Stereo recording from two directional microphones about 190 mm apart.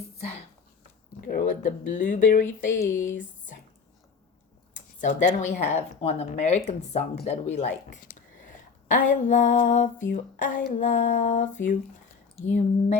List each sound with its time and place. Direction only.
0.2 s speech: 35° left (ahead or behind)
1.3 s speech: 45° left (ahead or behind)
4.9 s speech: 40° left (ahead or behind)
8.9 s speech: 45° left (ahead or behind)